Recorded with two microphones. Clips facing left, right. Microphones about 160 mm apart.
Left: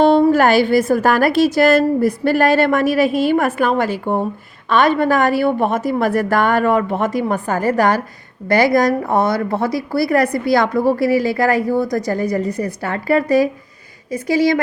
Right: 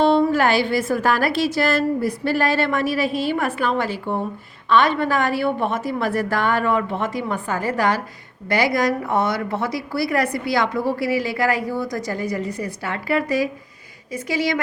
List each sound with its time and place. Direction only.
0.0 s a woman's voice: 45° left (ahead or behind)